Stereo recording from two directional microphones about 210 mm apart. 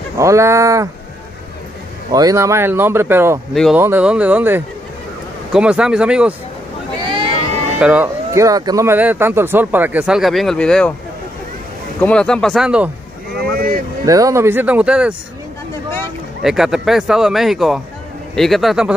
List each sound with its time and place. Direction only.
0.2 s speech: 15° right (ahead or behind)
2.1 s speech: 15° right (ahead or behind)
3.5 s speech: centre (ahead or behind)
7.0 s boat: 20° right (ahead or behind)
7.8 s speech: 10° right (ahead or behind)
12.0 s speech: 5° left (ahead or behind)
14.0 s speech: 15° right (ahead or behind)
16.4 s speech: centre (ahead or behind)